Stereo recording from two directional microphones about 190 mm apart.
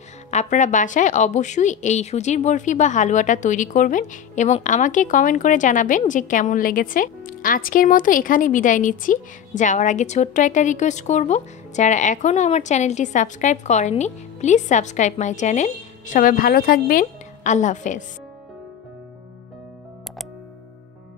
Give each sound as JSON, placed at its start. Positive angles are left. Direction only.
{"t": 0.3, "sound": "a woman's voice", "side_deg": 40}
{"t": 17.0, "sound": "a woman's voice", "side_deg": 40}